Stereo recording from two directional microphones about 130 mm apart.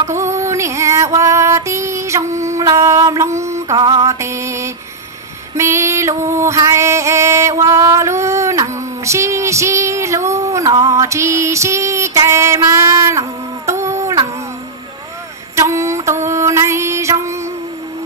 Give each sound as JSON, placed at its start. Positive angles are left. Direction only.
{"t": 0.3, "sound": "female singing", "side_deg": -25}
{"t": 3.7, "sound": "mantra", "side_deg": -30}
{"t": 5.6, "sound": "music", "side_deg": -20}
{"t": 15.5, "sound": "a sound", "side_deg": -25}
{"t": 16.3, "sound": "music", "side_deg": -20}